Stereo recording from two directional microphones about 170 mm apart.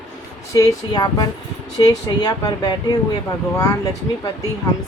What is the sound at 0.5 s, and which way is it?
Speech, 20° left (ahead or behind).